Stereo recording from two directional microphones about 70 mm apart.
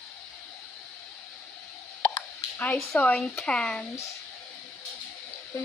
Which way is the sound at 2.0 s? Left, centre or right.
Left.